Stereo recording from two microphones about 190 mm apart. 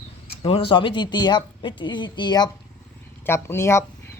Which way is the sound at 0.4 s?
30° left (ahead or behind).